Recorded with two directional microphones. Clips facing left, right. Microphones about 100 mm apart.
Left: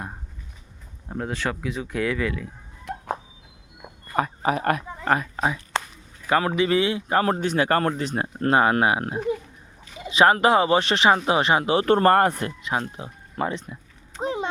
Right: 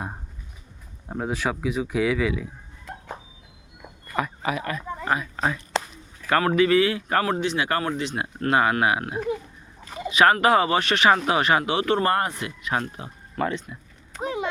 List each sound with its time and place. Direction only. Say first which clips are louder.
1.0 s speech: right 1 dB; 10° right (ahead or behind)
4.1 s speech: left 3 dB; 40° left (ahead or behind)
6.2 s speech: right 1 dB; 15° left (ahead or behind)
7.3 s speech: left 3 dB; 40° left (ahead or behind)
12.6 s speech: right 3 dB; 25° left (ahead or behind)
14.2 s a sound: left 1 dB; 30° left (ahead or behind)